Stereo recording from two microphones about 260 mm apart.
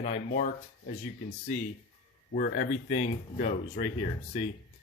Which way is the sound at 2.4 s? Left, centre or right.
Left.